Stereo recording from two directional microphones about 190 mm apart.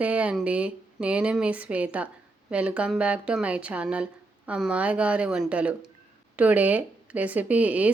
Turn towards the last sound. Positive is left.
turn(degrees=-10)  # may be behind; listen again after turning